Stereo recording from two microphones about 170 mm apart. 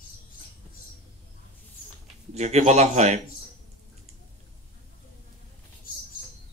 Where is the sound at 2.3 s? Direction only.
40° right (ahead or behind).